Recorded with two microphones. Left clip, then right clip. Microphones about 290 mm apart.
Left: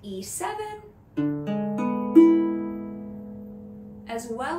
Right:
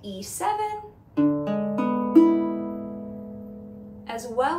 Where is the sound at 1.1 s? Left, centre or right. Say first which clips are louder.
Right 5 dB; centre.